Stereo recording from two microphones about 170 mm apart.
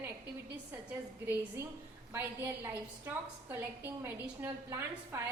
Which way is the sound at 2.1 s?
15° right (ahead or behind).